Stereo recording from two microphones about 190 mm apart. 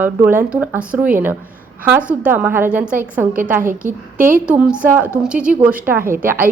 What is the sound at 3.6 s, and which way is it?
Speech, 45° right (ahead or behind).